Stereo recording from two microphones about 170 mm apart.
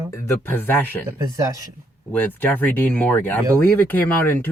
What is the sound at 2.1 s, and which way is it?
Speech, 10° left (ahead or behind).